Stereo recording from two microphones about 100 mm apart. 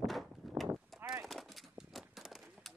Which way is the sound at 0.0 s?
Centre (ahead or behind).